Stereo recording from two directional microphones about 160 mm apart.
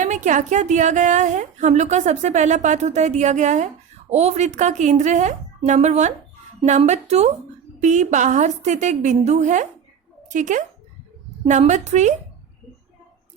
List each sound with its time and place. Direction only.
0.0 s a woman's voice: 50° right (ahead or behind)